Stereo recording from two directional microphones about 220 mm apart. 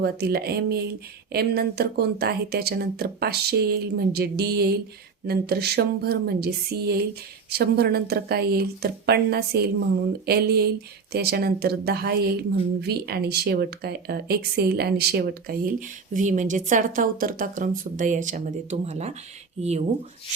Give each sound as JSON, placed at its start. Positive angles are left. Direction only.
{"t": 0.0, "sound": "speech", "side_deg": -45}